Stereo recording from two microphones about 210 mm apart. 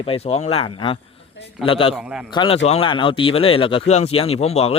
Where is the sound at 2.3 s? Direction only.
25° left (ahead or behind).